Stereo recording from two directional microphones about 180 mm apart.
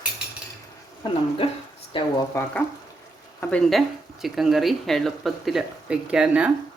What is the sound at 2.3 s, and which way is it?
Speech, 10° left (ahead or behind).